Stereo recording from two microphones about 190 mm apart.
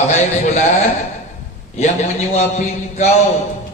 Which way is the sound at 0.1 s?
40° left (ahead or behind).